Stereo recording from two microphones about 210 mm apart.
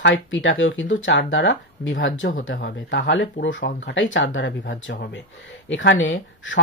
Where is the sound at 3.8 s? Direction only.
60° left (ahead or behind).